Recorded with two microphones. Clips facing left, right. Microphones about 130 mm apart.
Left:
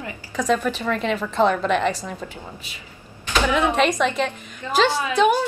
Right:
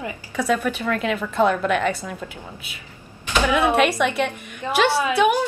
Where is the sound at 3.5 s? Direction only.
10° right (ahead or behind).